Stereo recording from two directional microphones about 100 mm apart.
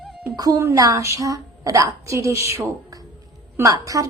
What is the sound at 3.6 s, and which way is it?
Speech, 35° right (ahead or behind).